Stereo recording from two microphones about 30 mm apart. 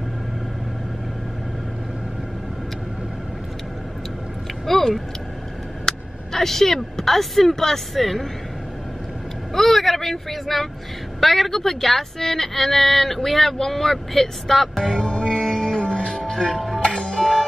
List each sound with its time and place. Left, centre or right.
4.6 s a sound: centre
5.9 s speech: centre
9.5 s speech: centre
15.0 s music: left
15.8 s music: left
16.5 s music: centre
16.8 s music: left
17.2 s music: centre